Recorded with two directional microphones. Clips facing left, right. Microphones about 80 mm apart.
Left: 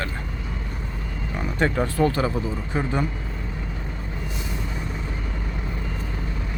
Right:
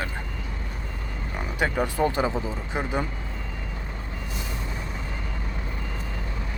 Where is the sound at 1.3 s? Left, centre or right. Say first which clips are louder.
Left 3 dB; centre.